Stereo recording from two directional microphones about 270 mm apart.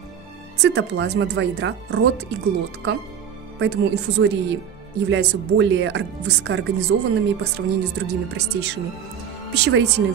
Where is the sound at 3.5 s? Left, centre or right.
Right.